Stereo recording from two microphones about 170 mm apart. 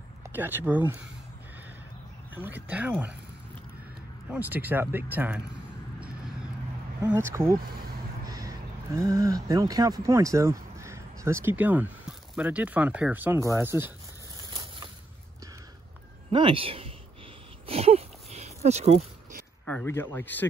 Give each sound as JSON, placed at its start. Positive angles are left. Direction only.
{"t": 0.2, "sound": "speech", "side_deg": -10}
{"t": 2.3, "sound": "speech", "side_deg": -10}
{"t": 4.3, "sound": "speech", "side_deg": -10}
{"t": 7.1, "sound": "speech", "side_deg": -15}
{"t": 7.6, "sound": "speech", "side_deg": -65}
{"t": 8.3, "sound": "speech", "side_deg": -20}
{"t": 16.3, "sound": "speech", "side_deg": -30}
{"t": 17.6, "sound": "a sound", "side_deg": -35}
{"t": 19.6, "sound": "speech", "side_deg": 10}